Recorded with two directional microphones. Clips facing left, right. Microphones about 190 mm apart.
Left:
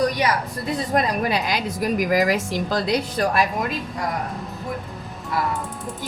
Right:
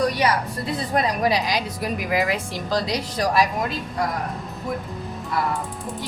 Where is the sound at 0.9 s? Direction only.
55° left (ahead or behind).